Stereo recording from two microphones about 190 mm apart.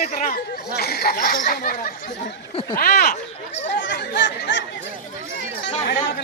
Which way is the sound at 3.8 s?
70° left (ahead or behind).